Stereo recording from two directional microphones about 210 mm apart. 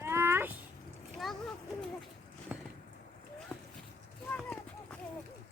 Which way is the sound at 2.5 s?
10° right (ahead or behind).